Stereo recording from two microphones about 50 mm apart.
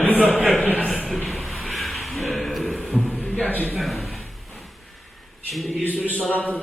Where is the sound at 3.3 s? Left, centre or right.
Left.